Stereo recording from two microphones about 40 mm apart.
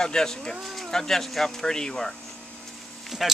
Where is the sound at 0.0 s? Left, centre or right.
Centre.